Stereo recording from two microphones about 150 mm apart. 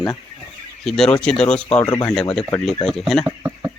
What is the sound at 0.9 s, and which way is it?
Speech, 5° left (ahead or behind).